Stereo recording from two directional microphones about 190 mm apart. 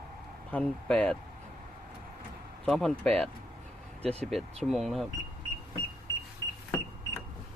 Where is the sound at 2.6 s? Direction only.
5° left (ahead or behind).